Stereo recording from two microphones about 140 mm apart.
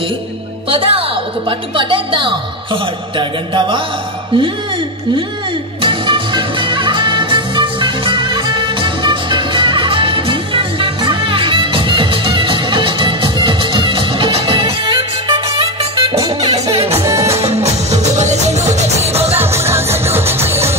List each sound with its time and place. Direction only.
0.7 s a woman's voice: 40° right (ahead or behind)
5.8 s music: 35° right (ahead or behind)
17.0 s music: 20° right (ahead or behind)
17.4 s music: 50° right (ahead or behind)
19.3 s music: 15° right (ahead or behind)